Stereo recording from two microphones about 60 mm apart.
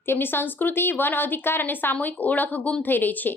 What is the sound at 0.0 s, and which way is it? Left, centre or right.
A woman's voice, left.